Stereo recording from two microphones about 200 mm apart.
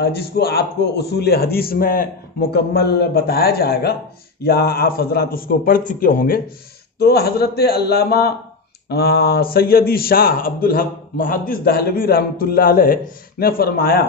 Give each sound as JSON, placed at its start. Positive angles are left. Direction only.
{"t": 0.0, "sound": "speech", "side_deg": 50}